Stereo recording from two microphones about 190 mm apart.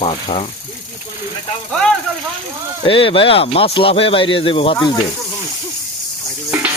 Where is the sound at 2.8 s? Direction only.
30° left (ahead or behind).